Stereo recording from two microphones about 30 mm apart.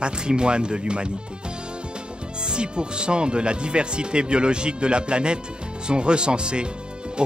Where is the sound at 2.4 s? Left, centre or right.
Right.